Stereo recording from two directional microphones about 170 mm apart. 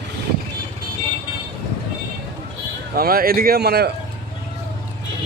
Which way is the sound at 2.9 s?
60° right (ahead or behind).